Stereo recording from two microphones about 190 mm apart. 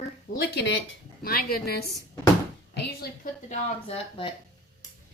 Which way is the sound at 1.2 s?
55° left (ahead or behind).